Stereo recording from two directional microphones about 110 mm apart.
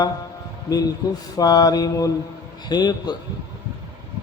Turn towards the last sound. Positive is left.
turn(degrees=40)  # may be behind; listen again after turning